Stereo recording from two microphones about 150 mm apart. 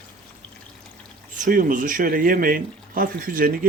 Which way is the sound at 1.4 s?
65° right (ahead or behind).